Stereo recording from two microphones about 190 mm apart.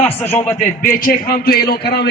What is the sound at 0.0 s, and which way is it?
Speech, 10° left (ahead or behind).